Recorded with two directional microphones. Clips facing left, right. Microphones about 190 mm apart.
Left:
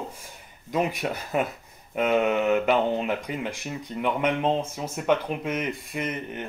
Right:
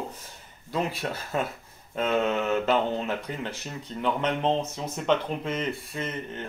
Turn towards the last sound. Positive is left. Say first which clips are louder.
# left 2 dB
turn(degrees=15)  # may be behind; listen again after turning